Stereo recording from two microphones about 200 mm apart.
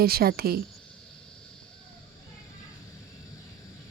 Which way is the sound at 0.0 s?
50° right (ahead or behind).